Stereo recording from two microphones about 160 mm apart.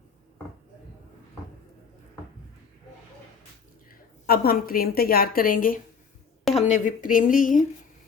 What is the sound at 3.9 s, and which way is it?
A woman's voice, 70° left (ahead or behind).